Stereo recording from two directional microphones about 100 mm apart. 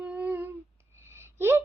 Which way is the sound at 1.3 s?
25° right (ahead or behind).